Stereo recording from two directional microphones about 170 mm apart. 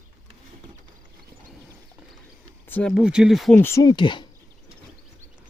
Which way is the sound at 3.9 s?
30° left (ahead or behind).